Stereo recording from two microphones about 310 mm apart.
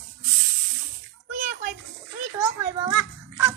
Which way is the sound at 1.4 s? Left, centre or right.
Right.